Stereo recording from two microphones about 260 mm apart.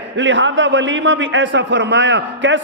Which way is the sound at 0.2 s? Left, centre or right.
Right.